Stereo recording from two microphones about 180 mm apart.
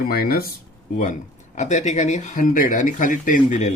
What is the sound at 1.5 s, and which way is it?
Speech, 40° left (ahead or behind).